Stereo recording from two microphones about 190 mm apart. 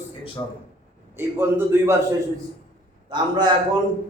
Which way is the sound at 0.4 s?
15° left (ahead or behind).